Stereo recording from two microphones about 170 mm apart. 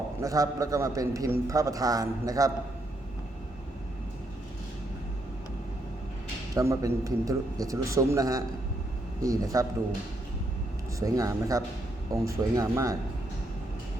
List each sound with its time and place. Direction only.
0.2 s a man's voice: 20° right (ahead or behind)
6.6 s a man's voice: 20° right (ahead or behind)
11.0 s a man's voice: 20° right (ahead or behind)